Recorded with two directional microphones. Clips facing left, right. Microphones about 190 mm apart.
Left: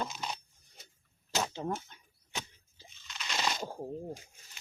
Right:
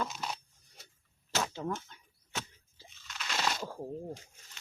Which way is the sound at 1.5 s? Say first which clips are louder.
Left 1 dB; 30° left (ahead or behind).